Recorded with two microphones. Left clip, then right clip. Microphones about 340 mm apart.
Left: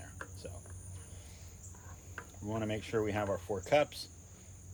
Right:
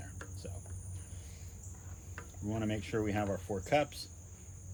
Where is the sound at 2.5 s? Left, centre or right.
Left.